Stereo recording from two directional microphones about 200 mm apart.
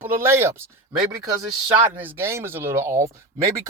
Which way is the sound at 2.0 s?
10° right (ahead or behind).